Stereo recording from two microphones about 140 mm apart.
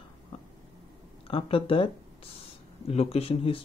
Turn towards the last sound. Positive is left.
turn(degrees=40)  # may be behind; listen again after turning